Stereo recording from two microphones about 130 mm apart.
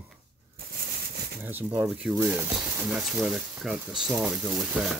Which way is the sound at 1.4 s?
15° right (ahead or behind).